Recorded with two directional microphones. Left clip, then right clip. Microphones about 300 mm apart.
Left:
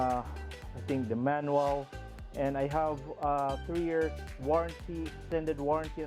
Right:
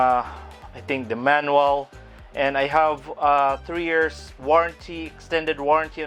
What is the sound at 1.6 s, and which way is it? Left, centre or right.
Speech, right.